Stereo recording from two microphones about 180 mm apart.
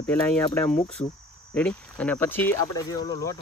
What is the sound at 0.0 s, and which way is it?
Speech, 10° left (ahead or behind).